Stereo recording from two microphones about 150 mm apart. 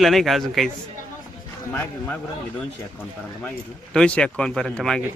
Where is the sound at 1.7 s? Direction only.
15° left (ahead or behind).